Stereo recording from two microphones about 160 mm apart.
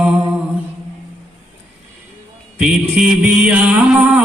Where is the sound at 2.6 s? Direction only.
5° right (ahead or behind).